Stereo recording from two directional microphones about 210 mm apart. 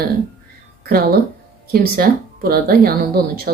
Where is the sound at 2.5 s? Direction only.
45° right (ahead or behind).